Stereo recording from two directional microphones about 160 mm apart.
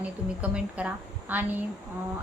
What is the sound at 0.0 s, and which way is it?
A woman's voice, 10° right (ahead or behind).